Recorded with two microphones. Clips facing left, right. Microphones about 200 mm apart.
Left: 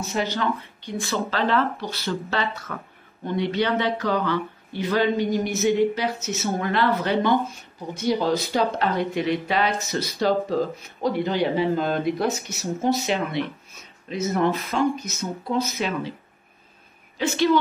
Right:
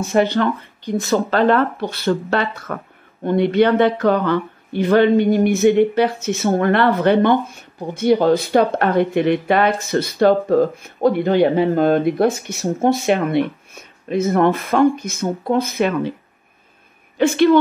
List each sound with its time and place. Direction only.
0.0 s speech: 55° right (ahead or behind)
17.2 s speech: 55° right (ahead or behind)